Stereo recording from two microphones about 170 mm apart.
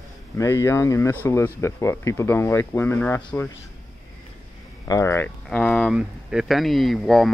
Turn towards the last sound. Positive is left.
turn(degrees=0)  # may be behind; listen again after turning